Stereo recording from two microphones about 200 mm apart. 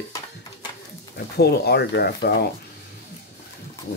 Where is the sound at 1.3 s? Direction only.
55° left (ahead or behind).